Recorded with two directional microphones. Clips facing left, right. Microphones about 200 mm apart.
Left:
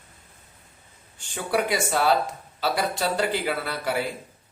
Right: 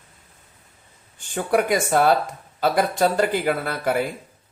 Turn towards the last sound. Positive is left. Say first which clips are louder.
# right 4 dB
turn(degrees=-50)  # may be behind; listen again after turning